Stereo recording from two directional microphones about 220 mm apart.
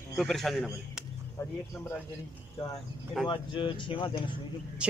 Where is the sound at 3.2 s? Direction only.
20° left (ahead or behind).